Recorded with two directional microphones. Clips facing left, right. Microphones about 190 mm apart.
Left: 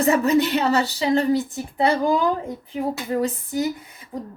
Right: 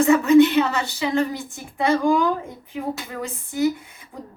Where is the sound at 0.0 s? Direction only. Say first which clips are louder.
Right 4 dB; 40° left (ahead or behind).